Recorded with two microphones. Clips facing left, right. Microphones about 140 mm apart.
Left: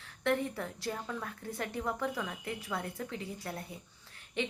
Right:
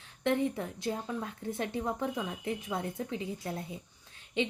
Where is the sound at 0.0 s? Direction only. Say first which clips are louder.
Right 2 dB; 20° right (ahead or behind).